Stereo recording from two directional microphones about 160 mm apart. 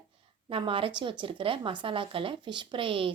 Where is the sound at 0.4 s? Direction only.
30° right (ahead or behind).